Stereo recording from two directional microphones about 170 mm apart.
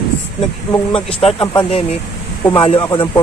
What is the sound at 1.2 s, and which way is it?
Speech, 35° left (ahead or behind).